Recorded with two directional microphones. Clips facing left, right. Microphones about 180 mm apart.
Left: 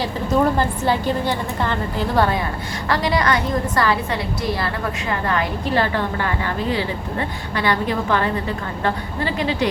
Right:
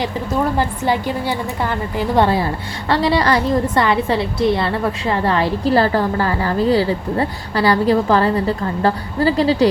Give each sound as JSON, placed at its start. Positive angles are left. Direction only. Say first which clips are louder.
{"t": 0.5, "sound": "a woman's voice", "louder": "right 1 dB", "side_deg": -15}
{"t": 2.1, "sound": "a woman's voice", "louder": "right 4 dB", "side_deg": -30}